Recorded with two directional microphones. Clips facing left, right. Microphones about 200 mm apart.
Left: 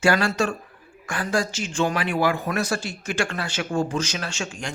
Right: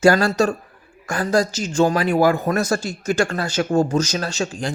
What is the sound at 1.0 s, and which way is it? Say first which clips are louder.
Speech: right 6 dB; 40° right (ahead or behind).